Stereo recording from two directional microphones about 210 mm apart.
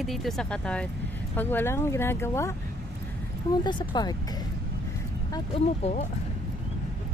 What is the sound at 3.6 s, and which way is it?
Speech, 20° left (ahead or behind).